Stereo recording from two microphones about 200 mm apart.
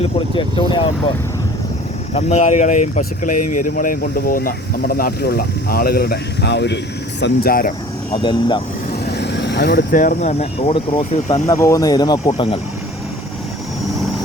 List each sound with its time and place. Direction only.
0.0 s speech: 25° left (ahead or behind)
2.1 s speech: 35° left (ahead or behind)
8.1 s speech: 25° left (ahead or behind)
9.0 s speech: 55° left (ahead or behind); by 11.4 s 35° left (ahead or behind)
11.4 s speech: 15° left (ahead or behind)
12.2 s speech: 30° left (ahead or behind)